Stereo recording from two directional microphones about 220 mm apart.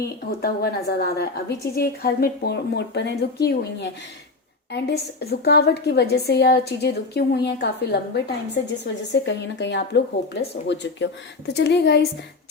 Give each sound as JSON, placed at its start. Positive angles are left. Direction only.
{"t": 0.0, "sound": "a woman's voice", "side_deg": 45}